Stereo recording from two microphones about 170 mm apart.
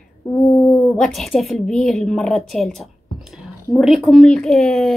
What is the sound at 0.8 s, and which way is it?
A woman's voice, centre (ahead or behind).